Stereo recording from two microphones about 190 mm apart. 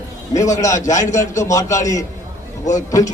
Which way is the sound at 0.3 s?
20° left (ahead or behind).